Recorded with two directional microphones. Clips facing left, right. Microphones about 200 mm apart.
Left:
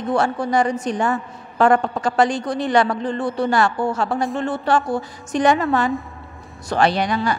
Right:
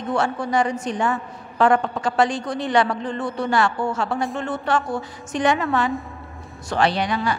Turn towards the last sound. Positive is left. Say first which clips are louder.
# left 2 dB
turn(degrees=45)  # may be behind; listen again after turning